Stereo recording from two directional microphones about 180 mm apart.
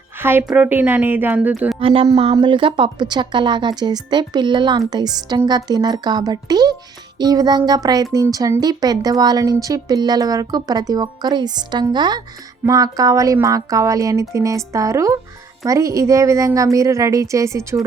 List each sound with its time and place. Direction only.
0.2 s speech: 10° right (ahead or behind)
1.8 s a sound: 30° right (ahead or behind)
2.1 s speech: 30° right (ahead or behind)